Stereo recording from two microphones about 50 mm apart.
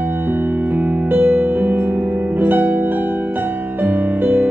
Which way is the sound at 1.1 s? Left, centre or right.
Right.